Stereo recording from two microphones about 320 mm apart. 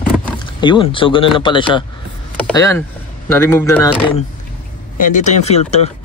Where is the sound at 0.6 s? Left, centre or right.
Centre.